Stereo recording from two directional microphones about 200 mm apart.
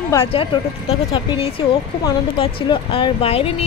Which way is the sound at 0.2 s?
25° left (ahead or behind).